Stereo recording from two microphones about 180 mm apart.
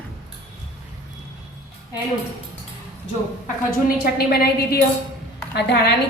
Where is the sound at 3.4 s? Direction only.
55° left (ahead or behind).